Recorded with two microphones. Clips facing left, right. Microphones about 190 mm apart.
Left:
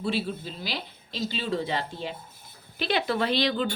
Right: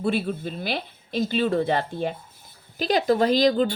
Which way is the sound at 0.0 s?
55° right (ahead or behind).